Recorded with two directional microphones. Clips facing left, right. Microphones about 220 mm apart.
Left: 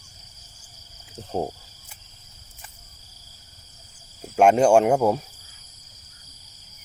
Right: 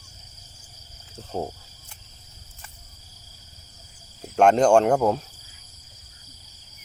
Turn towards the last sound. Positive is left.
turn(degrees=10)  # may be behind; listen again after turning